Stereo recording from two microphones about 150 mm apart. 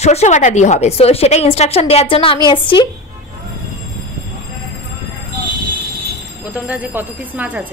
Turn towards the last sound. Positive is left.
turn(degrees=-10)  # may be behind; listen again after turning